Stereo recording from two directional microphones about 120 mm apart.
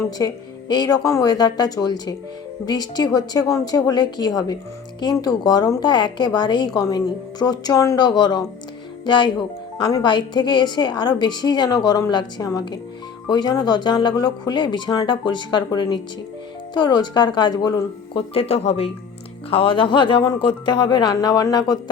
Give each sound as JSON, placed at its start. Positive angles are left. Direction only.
{"t": 0.0, "sound": "a woman's voice", "side_deg": 30}
{"t": 18.3, "sound": "speech", "side_deg": 60}
{"t": 19.5, "sound": "a woman's voice", "side_deg": 50}